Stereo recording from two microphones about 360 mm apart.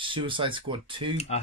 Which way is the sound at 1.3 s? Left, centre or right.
Centre.